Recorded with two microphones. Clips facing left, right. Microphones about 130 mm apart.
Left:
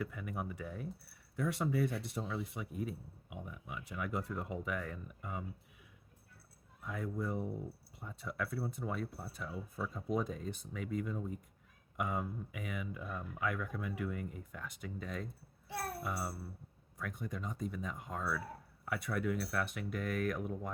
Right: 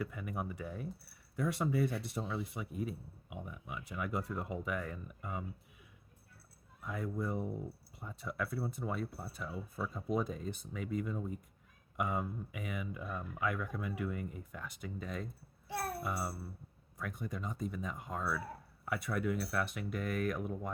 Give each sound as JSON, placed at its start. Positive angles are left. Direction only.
{"t": 0.0, "sound": "speech", "side_deg": -20}
{"t": 0.6, "sound": "speech", "side_deg": -30}
{"t": 1.4, "sound": "speech", "side_deg": -15}
{"t": 6.8, "sound": "speech", "side_deg": -15}
{"t": 8.4, "sound": "speech", "side_deg": -20}